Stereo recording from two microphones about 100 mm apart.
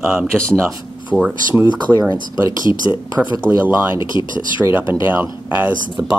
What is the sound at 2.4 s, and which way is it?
Speech, 30° right (ahead or behind).